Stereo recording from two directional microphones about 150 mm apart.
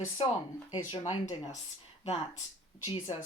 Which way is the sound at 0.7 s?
35° left (ahead or behind).